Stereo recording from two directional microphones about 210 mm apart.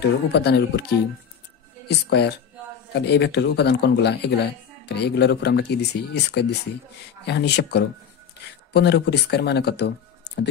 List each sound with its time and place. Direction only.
0.0 s speech: 50° left (ahead or behind)